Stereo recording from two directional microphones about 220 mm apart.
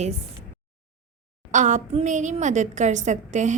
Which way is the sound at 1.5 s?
35° right (ahead or behind).